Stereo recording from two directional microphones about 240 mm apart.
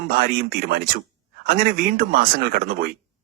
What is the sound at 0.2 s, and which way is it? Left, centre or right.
Speech, right.